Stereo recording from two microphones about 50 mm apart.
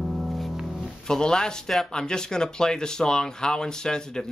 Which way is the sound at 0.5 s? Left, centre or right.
Centre.